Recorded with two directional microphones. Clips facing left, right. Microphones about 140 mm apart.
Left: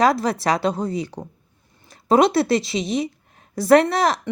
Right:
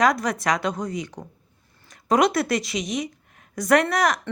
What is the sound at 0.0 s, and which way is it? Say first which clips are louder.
A woman's voice: left 3 dB; 30° left (ahead or behind).